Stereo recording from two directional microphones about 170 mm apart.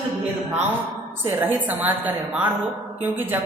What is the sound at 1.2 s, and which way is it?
A man's voice, 10° right (ahead or behind).